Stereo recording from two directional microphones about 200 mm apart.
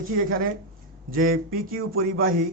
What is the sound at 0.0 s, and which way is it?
A man's voice, 45° right (ahead or behind).